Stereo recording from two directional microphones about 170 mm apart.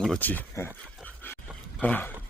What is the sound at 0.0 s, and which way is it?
Speech, 5° left (ahead or behind).